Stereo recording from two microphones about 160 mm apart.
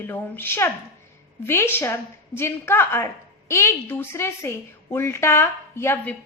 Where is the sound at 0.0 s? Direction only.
15° left (ahead or behind).